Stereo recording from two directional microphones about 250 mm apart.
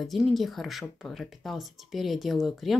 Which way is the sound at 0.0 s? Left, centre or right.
Centre.